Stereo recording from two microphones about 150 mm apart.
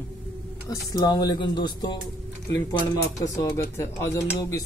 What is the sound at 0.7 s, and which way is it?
Speech, 25° left (ahead or behind).